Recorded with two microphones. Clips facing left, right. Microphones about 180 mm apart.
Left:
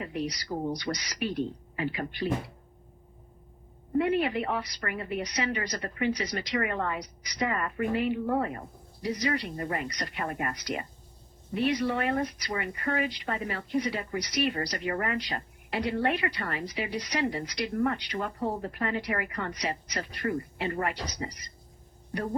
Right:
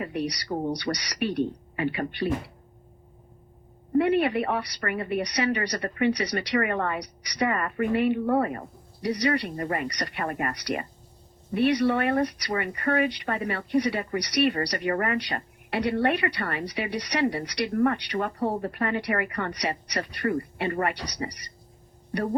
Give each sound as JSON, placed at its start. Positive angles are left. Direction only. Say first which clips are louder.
{"t": 0.0, "sound": "speech", "louder": "right 3 dB", "side_deg": -65}
{"t": 3.9, "sound": "speech", "louder": "right 4 dB", "side_deg": -65}